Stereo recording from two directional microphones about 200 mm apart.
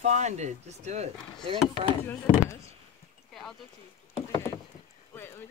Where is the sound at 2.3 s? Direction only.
15° left (ahead or behind).